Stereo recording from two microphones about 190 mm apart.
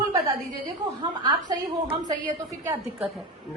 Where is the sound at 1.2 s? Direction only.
25° right (ahead or behind).